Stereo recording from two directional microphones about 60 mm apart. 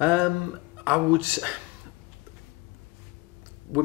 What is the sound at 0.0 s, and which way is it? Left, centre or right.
Speech, right.